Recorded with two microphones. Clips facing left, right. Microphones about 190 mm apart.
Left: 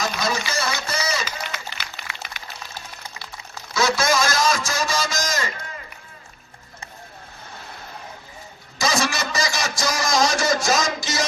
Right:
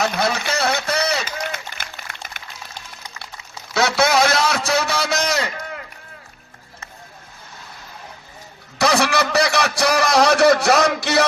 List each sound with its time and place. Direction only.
0.0 s run: 65° right (ahead or behind)
3.8 s a sound: 65° right (ahead or behind)
8.8 s speech: 65° right (ahead or behind)